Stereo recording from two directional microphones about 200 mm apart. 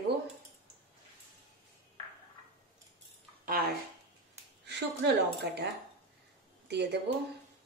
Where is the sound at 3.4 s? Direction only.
45° right (ahead or behind).